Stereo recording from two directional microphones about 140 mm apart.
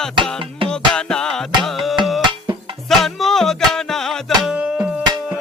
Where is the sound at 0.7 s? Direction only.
5° left (ahead or behind).